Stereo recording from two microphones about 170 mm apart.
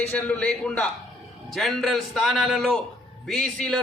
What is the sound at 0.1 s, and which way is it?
A man's voice, 10° left (ahead or behind).